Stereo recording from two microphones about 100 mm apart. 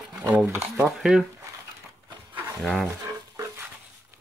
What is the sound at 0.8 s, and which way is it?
Speech, 5° right (ahead or behind).